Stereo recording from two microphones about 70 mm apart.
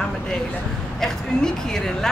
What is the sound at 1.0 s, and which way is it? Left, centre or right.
A woman's voice, centre.